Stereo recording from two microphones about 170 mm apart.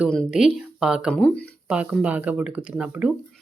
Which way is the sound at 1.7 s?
5° right (ahead or behind).